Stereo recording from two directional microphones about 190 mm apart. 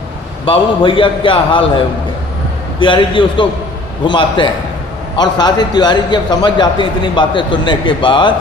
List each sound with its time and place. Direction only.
0.4 s a man's voice: 25° left (ahead or behind)